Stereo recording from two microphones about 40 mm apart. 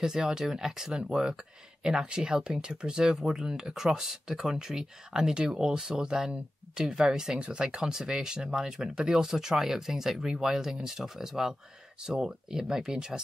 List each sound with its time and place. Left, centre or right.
0.0 s speech: centre